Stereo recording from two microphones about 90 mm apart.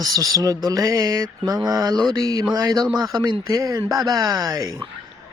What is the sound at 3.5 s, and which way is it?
Speech, 35° right (ahead or behind).